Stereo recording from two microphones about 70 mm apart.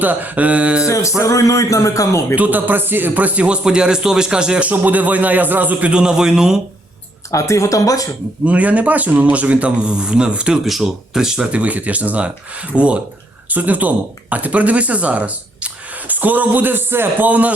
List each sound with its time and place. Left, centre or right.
0.0 s speech: right
0.9 s music: left
2.3 s speech: right
4.7 s speech: right
5.9 s speech: centre
7.3 s music: left
8.4 s speech: right
11.6 s speech: right